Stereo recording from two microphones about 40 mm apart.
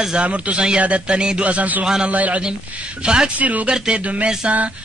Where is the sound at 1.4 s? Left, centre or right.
Right.